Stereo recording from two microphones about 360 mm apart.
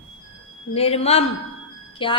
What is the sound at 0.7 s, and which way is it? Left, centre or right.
A woman's voice, centre.